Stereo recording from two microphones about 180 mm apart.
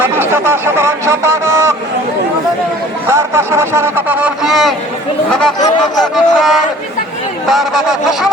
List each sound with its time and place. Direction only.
0.0 s speech: 10° right (ahead or behind)
3.1 s a man's voice: 15° right (ahead or behind)
6.0 s fowl: centre (ahead or behind)